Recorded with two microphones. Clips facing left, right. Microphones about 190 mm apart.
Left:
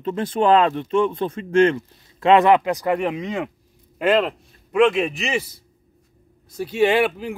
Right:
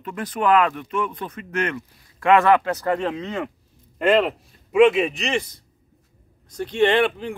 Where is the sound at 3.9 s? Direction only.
Centre (ahead or behind).